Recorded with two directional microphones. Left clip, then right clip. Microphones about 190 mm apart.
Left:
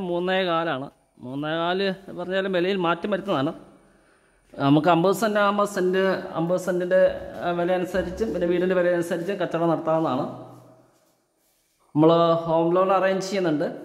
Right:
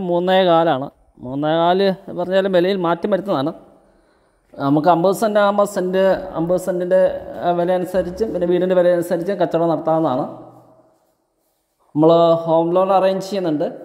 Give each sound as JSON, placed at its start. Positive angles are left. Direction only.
{"t": 0.0, "sound": "a man's voice", "side_deg": -25}
{"t": 4.6, "sound": "speech", "side_deg": 20}
{"t": 5.0, "sound": "speech", "side_deg": -10}
{"t": 5.3, "sound": "speech", "side_deg": -20}
{"t": 11.9, "sound": "speech", "side_deg": -5}